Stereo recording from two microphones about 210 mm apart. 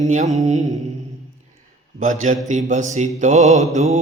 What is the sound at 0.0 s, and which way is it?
Mantra, 35° right (ahead or behind).